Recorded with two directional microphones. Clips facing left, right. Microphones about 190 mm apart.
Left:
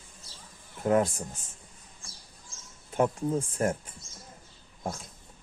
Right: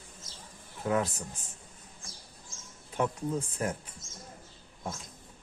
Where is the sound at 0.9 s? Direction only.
40° left (ahead or behind).